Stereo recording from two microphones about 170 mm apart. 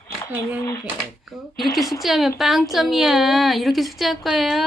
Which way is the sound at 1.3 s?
Centre (ahead or behind).